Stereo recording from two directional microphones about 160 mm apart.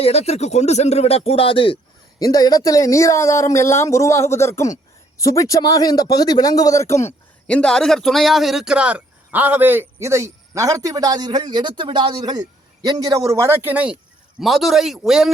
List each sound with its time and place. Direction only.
0.0 s speech: 40° left (ahead or behind); by 7.0 s 20° left (ahead or behind)
7.4 s a man's voice: 5° left (ahead or behind)